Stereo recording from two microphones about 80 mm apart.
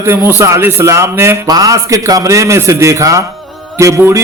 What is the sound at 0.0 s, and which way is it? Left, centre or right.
Speech, right.